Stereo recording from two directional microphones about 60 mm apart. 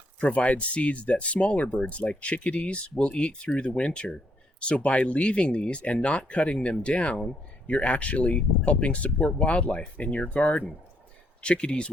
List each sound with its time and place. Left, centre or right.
0.2 s speech: left